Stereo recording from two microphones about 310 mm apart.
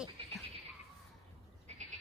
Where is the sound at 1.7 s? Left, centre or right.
Right.